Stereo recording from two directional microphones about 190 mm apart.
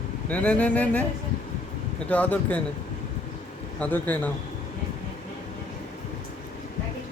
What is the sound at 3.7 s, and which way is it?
Speech, 10° left (ahead or behind).